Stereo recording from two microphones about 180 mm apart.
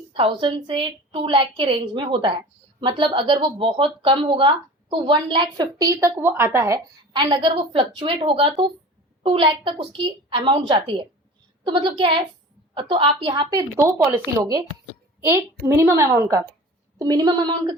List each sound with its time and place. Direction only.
0.1 s a woman's voice: 30° right (ahead or behind)